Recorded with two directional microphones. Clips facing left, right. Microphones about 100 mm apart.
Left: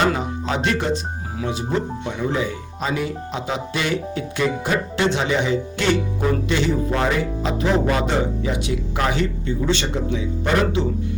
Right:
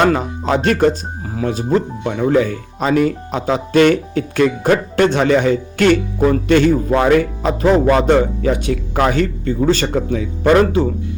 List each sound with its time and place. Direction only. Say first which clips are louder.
0.0 s speech: right 5 dB; 50° right (ahead or behind)